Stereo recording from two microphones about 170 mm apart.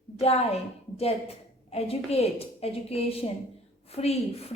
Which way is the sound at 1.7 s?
35° left (ahead or behind).